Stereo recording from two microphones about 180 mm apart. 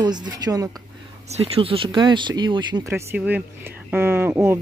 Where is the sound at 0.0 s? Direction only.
25° right (ahead or behind).